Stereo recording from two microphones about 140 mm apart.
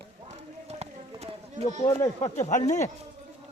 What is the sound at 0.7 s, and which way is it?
Clip-clop, 50° right (ahead or behind).